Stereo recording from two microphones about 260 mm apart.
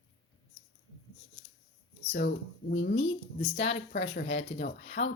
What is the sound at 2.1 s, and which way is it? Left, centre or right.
Speech, left.